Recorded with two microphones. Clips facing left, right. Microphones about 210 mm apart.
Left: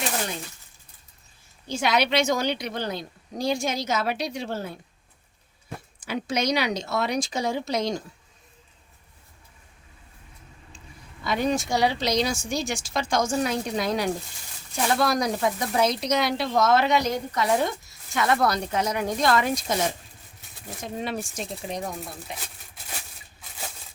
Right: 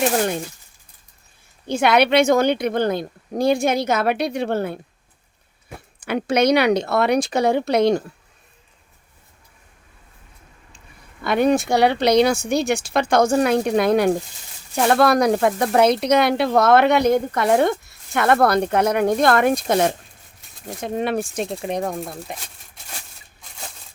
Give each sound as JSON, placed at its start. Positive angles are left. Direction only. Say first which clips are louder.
{"t": 1.6, "sound": "speech", "louder": "right 7 dB", "side_deg": -60}
{"t": 6.0, "sound": "speech", "louder": "right 9 dB", "side_deg": -60}
{"t": 11.2, "sound": "speech", "louder": "right 7 dB", "side_deg": -60}